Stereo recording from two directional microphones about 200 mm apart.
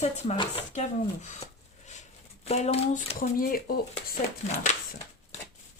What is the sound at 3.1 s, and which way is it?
Speech, 45° left (ahead or behind).